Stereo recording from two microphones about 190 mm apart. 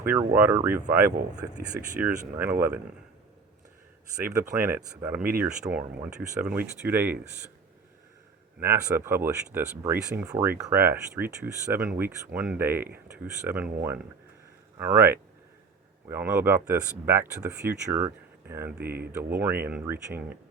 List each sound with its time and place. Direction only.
0.3 s speech: 10° right (ahead or behind)
4.2 s speech: 15° right (ahead or behind)
8.6 s speech: 10° right (ahead or behind)